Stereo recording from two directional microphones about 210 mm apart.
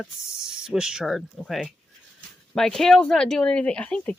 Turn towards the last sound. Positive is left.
turn(degrees=5)  # may be behind; listen again after turning